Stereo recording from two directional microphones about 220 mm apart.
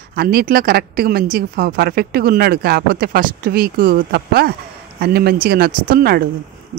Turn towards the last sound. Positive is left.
turn(degrees=-45)  # may be behind; listen again after turning